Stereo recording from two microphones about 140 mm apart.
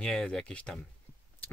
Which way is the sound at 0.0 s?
5° left (ahead or behind).